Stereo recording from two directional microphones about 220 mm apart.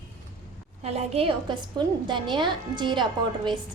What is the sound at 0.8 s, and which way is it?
A woman's voice, 30° right (ahead or behind).